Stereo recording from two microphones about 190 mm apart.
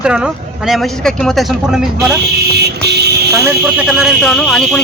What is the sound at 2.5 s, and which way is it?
Vehicle, 60° right (ahead or behind).